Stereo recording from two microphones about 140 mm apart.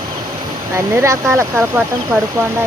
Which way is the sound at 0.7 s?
20° right (ahead or behind).